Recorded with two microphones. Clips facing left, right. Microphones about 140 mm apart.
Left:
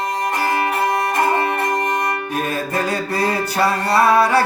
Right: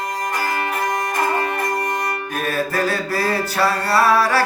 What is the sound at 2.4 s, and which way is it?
Mantra, 20° left (ahead or behind).